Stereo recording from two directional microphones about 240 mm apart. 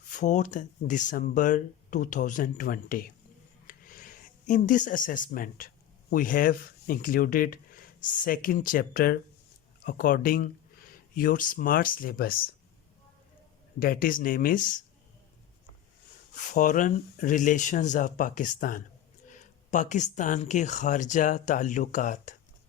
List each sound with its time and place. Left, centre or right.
0.1 s speech: left
13.7 s speech: left
16.3 s speech: left